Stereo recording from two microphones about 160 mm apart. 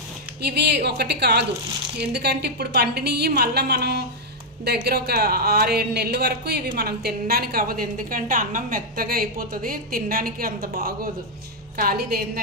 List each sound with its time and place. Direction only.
0.4 s a woman's voice: 90° right; by 12.3 s 70° right (ahead or behind)